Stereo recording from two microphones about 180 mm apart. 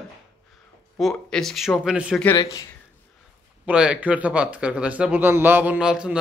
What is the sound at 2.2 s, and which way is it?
Speech, 20° left (ahead or behind).